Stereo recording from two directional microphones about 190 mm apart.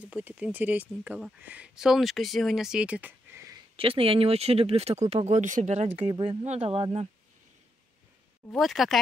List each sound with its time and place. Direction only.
0.0 s speech: 5° right (ahead or behind)
3.7 s speech: 30° right (ahead or behind)
5.9 s speech: 25° right (ahead or behind)
8.5 s speech: centre (ahead or behind)